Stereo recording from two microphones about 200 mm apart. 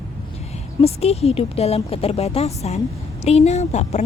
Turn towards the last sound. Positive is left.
turn(degrees=35)  # may be behind; listen again after turning